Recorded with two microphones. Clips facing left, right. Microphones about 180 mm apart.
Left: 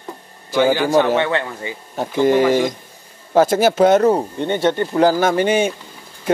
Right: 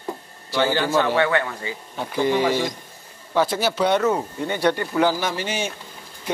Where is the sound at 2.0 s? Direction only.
50° left (ahead or behind); by 5.0 s 25° left (ahead or behind).